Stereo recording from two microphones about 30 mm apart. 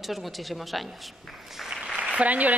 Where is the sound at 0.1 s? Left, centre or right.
Centre.